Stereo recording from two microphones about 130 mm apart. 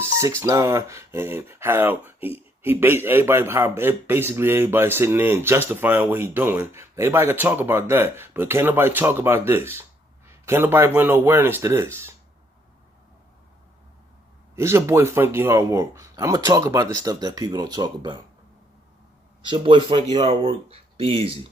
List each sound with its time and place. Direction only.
0.0 s a man's voice: 25° right (ahead or behind)
14.5 s speech: 20° right (ahead or behind)
19.5 s speech: 40° right (ahead or behind)
20.2 s speech: 45° right (ahead or behind)